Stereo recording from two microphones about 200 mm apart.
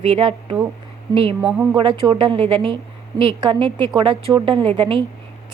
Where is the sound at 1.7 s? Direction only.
25° right (ahead or behind).